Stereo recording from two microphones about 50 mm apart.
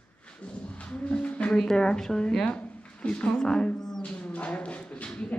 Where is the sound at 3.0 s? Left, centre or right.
Left.